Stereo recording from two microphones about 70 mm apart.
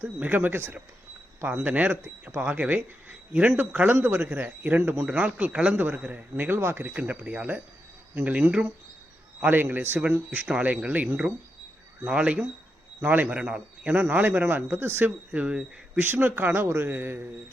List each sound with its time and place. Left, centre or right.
0.0 s speech: right
5.1 s speech: right
6.3 s speech: right
6.8 s a man's voice: right
13.9 s speech: right
15.3 s speech: centre
16.0 s speech: right